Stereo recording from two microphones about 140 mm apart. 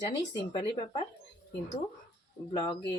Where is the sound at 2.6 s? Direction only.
40° left (ahead or behind).